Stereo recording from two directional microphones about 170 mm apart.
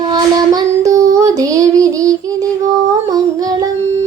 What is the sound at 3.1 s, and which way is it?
Humming, 20° right (ahead or behind).